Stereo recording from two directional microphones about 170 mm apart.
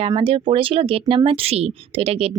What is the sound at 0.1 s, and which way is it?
Speech, 30° right (ahead or behind).